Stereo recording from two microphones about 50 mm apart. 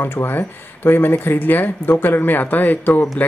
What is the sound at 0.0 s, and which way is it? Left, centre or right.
Speech, left.